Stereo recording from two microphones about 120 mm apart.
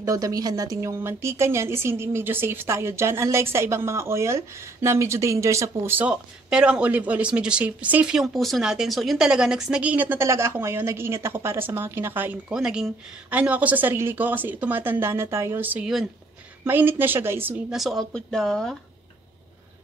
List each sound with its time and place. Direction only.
0.0 s a woman's voice: 30° right (ahead or behind)
12.5 s a woman's voice: 5° right (ahead or behind)
17.6 s speech: centre (ahead or behind)